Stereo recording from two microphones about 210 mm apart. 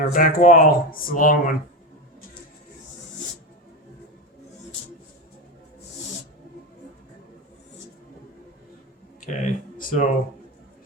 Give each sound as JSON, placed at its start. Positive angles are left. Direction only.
{"t": 0.1, "sound": "speech", "side_deg": 40}
{"t": 9.2, "sound": "speech", "side_deg": 40}